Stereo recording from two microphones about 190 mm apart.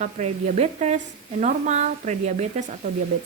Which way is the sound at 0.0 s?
40° right (ahead or behind).